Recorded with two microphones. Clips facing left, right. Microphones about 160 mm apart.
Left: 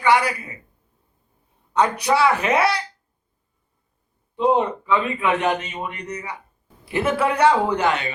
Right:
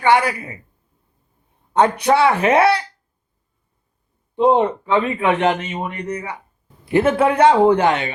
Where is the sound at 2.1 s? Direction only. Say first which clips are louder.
Right 3 dB; 25° right (ahead or behind).